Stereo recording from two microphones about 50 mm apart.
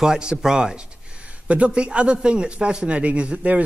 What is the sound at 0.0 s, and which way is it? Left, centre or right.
A man's voice, centre.